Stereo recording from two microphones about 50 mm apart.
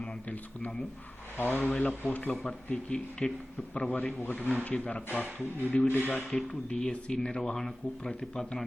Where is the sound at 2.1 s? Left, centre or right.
Left.